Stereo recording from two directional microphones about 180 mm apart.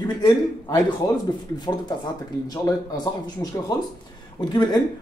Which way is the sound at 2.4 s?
20° left (ahead or behind).